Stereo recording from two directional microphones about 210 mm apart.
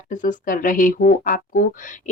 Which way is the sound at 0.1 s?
40° left (ahead or behind).